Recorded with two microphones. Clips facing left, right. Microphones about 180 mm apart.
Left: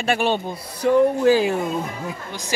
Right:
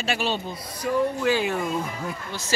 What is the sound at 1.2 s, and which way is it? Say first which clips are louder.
Speech: left 6 dB; 35° left (ahead or behind).